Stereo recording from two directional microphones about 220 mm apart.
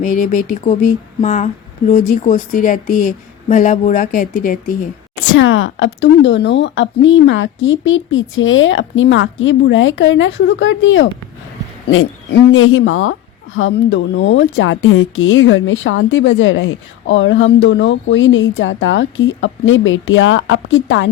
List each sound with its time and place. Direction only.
0.0 s speech: 35° left (ahead or behind)
5.1 s speech: 65° left (ahead or behind)